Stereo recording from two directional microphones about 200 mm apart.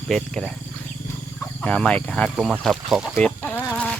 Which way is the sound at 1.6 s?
5° left (ahead or behind).